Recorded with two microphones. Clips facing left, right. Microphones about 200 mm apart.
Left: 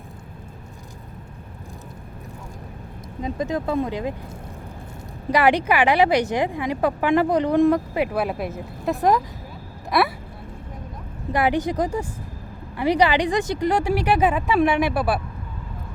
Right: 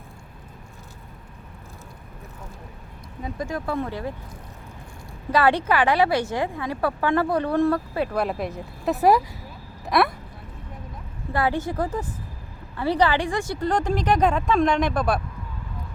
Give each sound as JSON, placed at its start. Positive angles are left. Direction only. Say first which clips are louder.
{"t": 3.2, "sound": "speech", "louder": "left 4 dB", "side_deg": 20}
{"t": 5.3, "sound": "a woman's voice", "louder": "left 2 dB", "side_deg": 15}
{"t": 11.3, "sound": "a woman's voice", "louder": "left 3 dB", "side_deg": 15}